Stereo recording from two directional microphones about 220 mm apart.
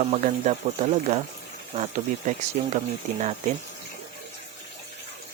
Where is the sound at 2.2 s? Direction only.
35° right (ahead or behind).